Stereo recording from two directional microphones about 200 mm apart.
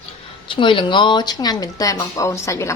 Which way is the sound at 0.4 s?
25° left (ahead or behind).